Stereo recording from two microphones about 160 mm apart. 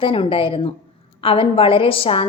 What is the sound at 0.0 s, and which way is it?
A woman's voice, 35° left (ahead or behind).